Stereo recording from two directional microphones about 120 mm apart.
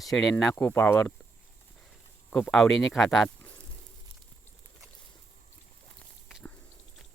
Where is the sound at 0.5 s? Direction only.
15° left (ahead or behind).